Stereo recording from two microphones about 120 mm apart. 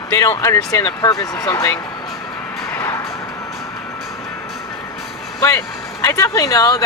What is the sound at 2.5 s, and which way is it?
Vehicle, 25° left (ahead or behind).